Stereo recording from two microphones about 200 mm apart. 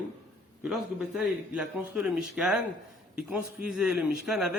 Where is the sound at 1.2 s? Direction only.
5° right (ahead or behind).